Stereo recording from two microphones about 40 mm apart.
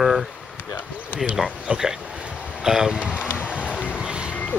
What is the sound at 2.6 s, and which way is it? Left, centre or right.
Speech, centre.